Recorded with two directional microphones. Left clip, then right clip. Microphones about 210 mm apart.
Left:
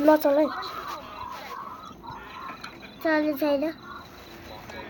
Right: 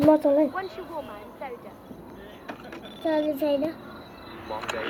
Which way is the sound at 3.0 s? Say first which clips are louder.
Left 1 dB; 35° left (ahead or behind).